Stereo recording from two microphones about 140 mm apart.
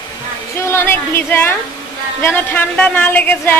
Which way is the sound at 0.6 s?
20° left (ahead or behind).